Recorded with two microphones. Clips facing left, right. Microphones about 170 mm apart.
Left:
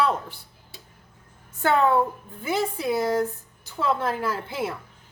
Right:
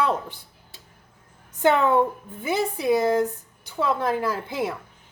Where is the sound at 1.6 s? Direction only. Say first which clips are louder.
Right 2 dB; 20° right (ahead or behind).